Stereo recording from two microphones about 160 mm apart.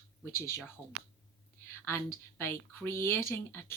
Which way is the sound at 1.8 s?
15° left (ahead or behind).